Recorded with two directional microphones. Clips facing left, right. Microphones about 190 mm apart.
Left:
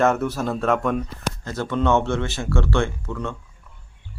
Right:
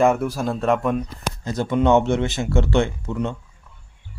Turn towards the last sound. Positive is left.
turn(degrees=-20)  # may be behind; listen again after turning